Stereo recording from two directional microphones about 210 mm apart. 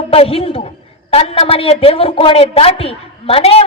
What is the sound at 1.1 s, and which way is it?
A woman's voice, 25° left (ahead or behind).